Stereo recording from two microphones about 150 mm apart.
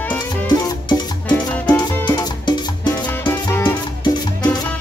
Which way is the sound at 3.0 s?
10° left (ahead or behind).